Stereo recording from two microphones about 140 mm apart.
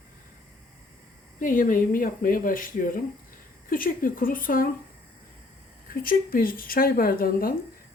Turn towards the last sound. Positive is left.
turn(degrees=90)